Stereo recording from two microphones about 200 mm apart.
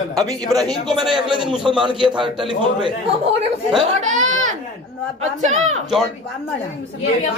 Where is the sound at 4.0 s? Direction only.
35° right (ahead or behind).